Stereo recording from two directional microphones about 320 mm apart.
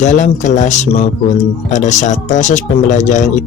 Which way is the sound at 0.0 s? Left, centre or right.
Left.